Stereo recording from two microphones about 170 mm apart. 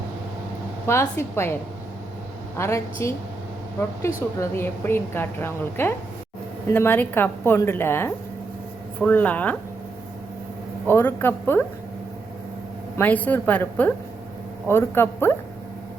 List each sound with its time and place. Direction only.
0.9 s a woman's voice: 15° left (ahead or behind)
2.6 s a woman's voice: 15° left (ahead or behind)
4.4 s a woman's voice: 15° left (ahead or behind)
10.8 s a woman's voice: 10° left (ahead or behind)
13.0 s a woman's voice: 10° left (ahead or behind)